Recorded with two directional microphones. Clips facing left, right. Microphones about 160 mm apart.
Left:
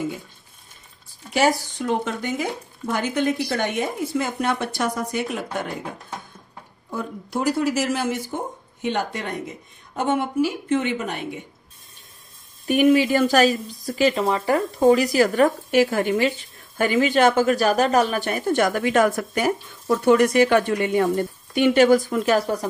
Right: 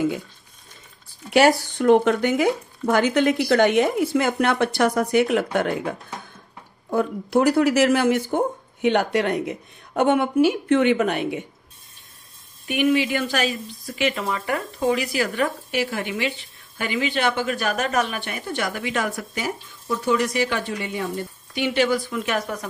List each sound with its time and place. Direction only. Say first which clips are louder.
1.3 s speech: right 4 dB; 65° right (ahead or behind)
6.9 s speech: right 7 dB; 65° right (ahead or behind)
8.8 s speech: right 6 dB; 75° right (ahead or behind)
12.6 s speech: left 4 dB; 40° left (ahead or behind)